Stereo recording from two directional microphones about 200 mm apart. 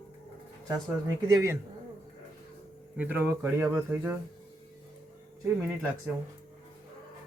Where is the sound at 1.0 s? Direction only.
15° right (ahead or behind).